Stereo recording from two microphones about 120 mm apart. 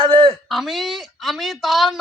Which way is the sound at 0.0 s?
45° right (ahead or behind).